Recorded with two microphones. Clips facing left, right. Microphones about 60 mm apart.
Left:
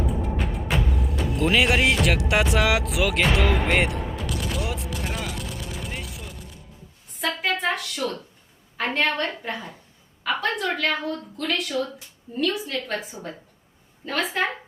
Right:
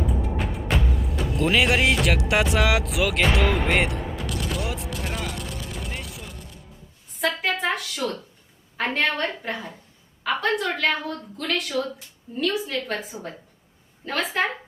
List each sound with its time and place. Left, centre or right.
0.1 s music: centre
7.2 s a sound: centre
8.8 s a woman's voice: centre